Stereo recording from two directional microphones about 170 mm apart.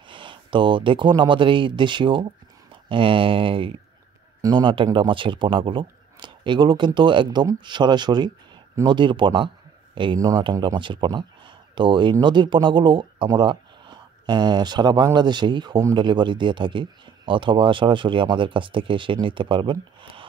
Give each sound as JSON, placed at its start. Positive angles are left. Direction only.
{"t": 0.1, "sound": "a man's voice", "side_deg": -30}